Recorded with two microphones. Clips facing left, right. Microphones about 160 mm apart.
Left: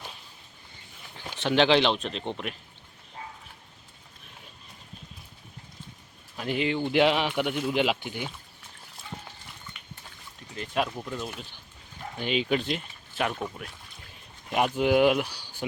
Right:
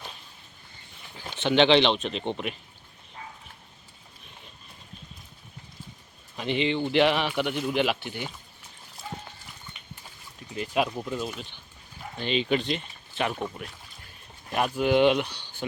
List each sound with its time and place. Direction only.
1.3 s speech: centre (ahead or behind)
6.3 s speech: 5° left (ahead or behind)
9.7 s dog: 20° right (ahead or behind)
10.6 s speech: 10° right (ahead or behind)
12.1 s speech: 10° left (ahead or behind)
14.5 s speech: 15° left (ahead or behind)
14.9 s speech: 5° left (ahead or behind)